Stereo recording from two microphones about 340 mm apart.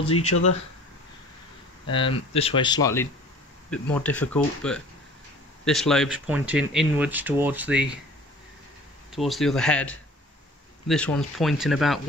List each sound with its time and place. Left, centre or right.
0.0 s speech: centre
0.3 s speech: left
1.9 s speech: centre
9.1 s speech: centre